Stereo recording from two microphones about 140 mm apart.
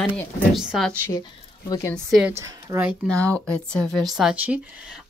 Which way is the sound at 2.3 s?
20° right (ahead or behind).